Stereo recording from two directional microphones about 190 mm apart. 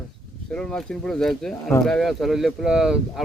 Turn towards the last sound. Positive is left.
turn(degrees=-5)  # may be behind; listen again after turning